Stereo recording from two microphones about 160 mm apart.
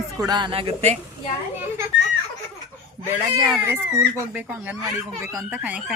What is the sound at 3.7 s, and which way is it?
Speech, 15° right (ahead or behind).